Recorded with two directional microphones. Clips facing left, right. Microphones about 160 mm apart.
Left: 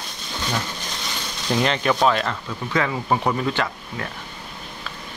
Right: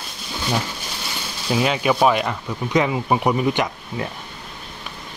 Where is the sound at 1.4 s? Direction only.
10° right (ahead or behind).